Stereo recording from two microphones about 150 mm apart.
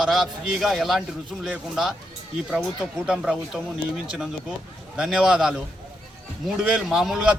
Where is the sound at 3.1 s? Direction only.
5° right (ahead or behind).